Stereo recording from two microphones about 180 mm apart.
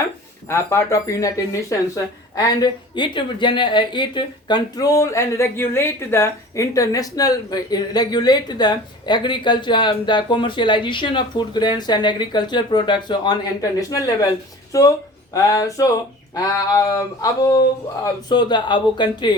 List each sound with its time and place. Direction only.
0.5 s speech: 15° left (ahead or behind)
2.3 s speech: 20° left (ahead or behind)